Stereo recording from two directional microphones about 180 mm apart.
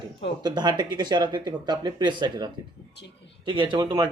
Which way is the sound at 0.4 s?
25° right (ahead or behind).